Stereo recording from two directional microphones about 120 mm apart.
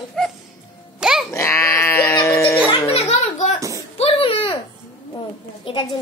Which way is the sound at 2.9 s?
60° left (ahead or behind).